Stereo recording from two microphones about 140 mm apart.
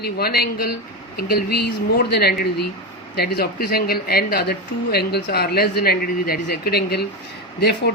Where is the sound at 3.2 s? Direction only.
90° left.